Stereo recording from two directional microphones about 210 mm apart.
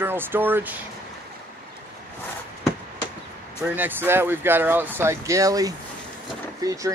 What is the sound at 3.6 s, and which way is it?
Speech, 10° right (ahead or behind).